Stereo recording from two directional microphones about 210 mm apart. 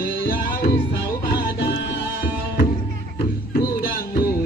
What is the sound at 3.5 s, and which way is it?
Music, 45° left (ahead or behind).